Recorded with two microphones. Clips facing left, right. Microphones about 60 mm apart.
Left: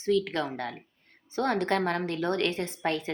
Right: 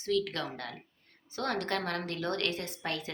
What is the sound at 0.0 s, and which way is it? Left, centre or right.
A woman's voice, left.